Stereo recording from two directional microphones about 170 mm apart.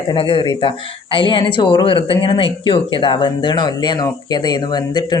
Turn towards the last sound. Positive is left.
turn(degrees=25)  # may be behind; listen again after turning